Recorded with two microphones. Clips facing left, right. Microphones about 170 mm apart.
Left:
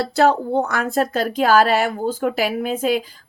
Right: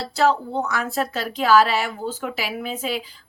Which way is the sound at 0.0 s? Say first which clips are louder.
Left 4 dB; 55° left (ahead or behind).